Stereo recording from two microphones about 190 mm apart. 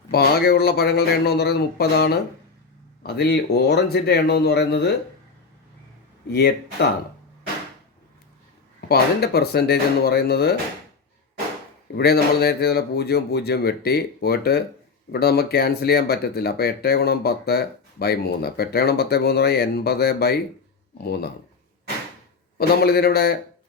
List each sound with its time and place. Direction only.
0.1 s speech: 55° left (ahead or behind)
6.2 s speech: 60° left (ahead or behind)
8.9 s speech: 55° left (ahead or behind)
11.9 s speech: 55° left (ahead or behind)
22.5 s speech: 55° left (ahead or behind)